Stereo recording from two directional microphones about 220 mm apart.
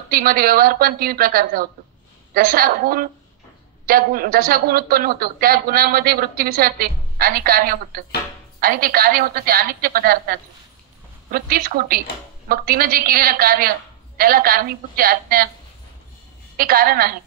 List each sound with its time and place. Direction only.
0.1 s a man's voice: 40° right (ahead or behind)
16.5 s a man's voice: 40° right (ahead or behind)